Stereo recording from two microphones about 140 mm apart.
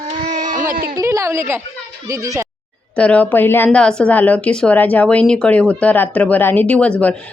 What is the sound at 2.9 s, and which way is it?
A woman's voice, 10° left (ahead or behind).